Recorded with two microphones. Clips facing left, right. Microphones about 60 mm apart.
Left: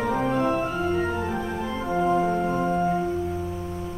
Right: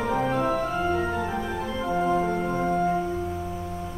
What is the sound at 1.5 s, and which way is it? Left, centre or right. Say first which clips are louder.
Organ: even; centre.